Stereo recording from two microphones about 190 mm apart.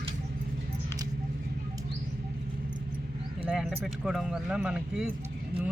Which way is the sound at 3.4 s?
5° right (ahead or behind).